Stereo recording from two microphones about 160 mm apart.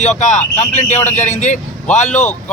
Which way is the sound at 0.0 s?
45° left (ahead or behind).